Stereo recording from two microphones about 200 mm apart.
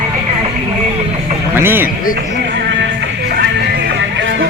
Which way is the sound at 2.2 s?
55° right (ahead or behind).